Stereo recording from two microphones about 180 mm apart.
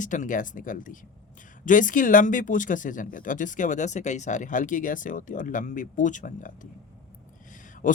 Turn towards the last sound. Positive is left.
turn(degrees=45)  # may be behind; listen again after turning